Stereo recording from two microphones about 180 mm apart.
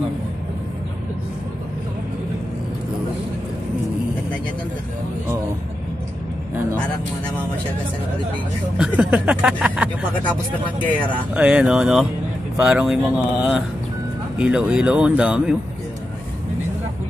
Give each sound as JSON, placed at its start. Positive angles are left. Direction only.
{"t": 8.7, "sound": "speech", "side_deg": -5}
{"t": 11.3, "sound": "speech", "side_deg": -5}